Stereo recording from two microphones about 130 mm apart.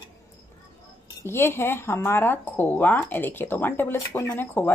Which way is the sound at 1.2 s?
20° left (ahead or behind).